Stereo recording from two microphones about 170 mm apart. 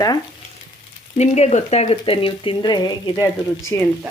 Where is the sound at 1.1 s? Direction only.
40° left (ahead or behind); by 3.9 s 20° left (ahead or behind).